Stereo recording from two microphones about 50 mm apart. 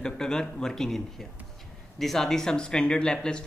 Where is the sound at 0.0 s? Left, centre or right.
Centre.